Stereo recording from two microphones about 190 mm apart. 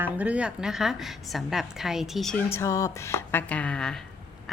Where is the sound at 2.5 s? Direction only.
15° left (ahead or behind).